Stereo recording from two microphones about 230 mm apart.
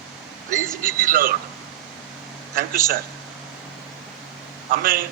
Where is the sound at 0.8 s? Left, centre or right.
Right.